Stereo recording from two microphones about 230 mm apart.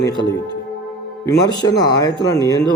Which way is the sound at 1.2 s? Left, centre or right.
Centre.